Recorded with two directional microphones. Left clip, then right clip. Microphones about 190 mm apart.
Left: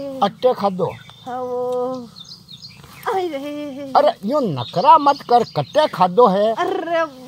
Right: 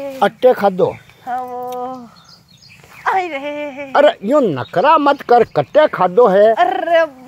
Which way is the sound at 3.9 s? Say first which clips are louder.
Right 4 dB; 45° right (ahead or behind).